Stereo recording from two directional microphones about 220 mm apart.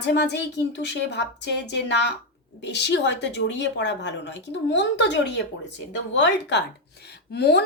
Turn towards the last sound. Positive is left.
turn(degrees=45)  # may be behind; listen again after turning